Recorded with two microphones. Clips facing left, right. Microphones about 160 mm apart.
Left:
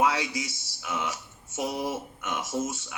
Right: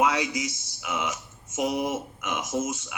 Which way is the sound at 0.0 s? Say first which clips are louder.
Right 2 dB; 30° left (ahead or behind).